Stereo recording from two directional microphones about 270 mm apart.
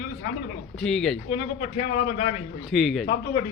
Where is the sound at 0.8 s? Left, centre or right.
Centre.